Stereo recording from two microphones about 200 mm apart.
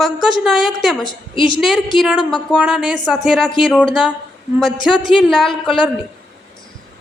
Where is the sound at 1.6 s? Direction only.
Centre (ahead or behind).